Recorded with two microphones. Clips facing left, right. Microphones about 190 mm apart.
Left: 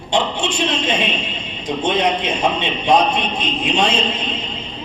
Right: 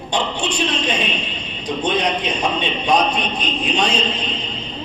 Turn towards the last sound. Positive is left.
turn(degrees=25)  # may be behind; listen again after turning